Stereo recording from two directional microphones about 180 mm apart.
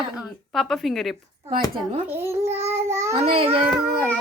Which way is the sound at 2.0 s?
15° right (ahead or behind).